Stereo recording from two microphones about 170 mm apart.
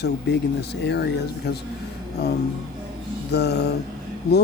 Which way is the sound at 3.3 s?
80° left.